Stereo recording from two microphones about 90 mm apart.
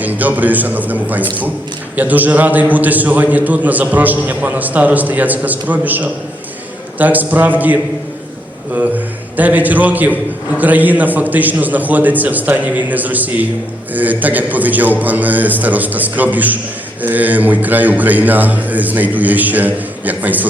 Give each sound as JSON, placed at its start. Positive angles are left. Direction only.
{"t": 0.0, "sound": "a man's voice", "side_deg": -20}
{"t": 8.7, "sound": "a man's voice", "side_deg": -20}